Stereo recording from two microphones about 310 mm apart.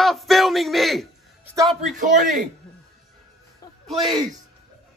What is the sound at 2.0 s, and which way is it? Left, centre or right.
Speech, right.